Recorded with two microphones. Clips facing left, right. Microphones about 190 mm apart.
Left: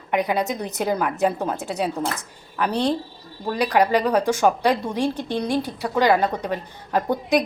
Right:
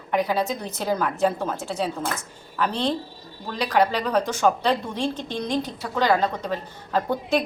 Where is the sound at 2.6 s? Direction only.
15° left (ahead or behind).